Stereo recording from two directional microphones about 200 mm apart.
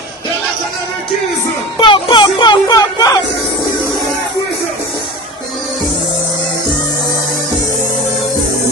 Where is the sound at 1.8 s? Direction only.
25° left (ahead or behind).